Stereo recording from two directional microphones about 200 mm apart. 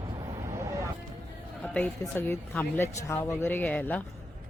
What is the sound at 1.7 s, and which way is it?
Speech, 10° left (ahead or behind).